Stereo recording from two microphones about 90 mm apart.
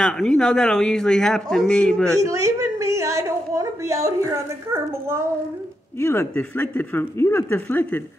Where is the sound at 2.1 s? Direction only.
35° right (ahead or behind).